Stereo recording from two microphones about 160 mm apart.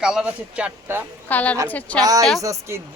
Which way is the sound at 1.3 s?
10° left (ahead or behind).